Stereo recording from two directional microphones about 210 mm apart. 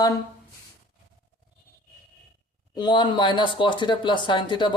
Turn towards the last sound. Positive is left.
turn(degrees=20)  # may be behind; listen again after turning